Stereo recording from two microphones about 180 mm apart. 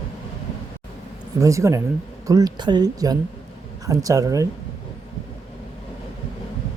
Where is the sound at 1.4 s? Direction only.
15° right (ahead or behind).